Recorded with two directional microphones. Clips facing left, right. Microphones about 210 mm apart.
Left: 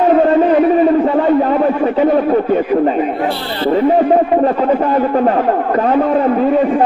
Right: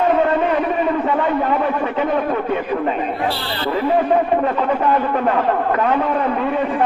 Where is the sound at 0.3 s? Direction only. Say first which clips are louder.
Left 8 dB; 35° left (ahead or behind).